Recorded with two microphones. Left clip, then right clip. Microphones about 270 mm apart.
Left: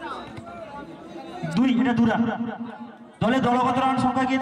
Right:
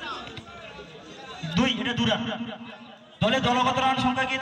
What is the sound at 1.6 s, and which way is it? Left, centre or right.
A man's voice, left.